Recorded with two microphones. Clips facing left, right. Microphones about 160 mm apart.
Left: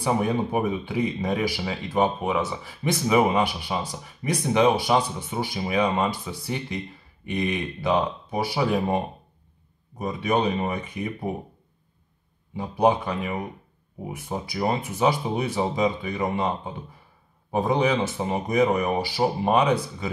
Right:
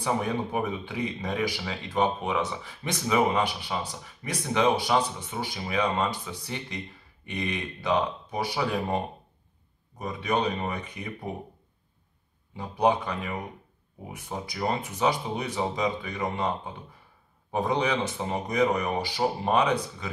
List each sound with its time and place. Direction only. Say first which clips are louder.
0.0 s speech: left 4 dB; 10° left (ahead or behind)
12.5 s speech: left 3 dB; 10° left (ahead or behind)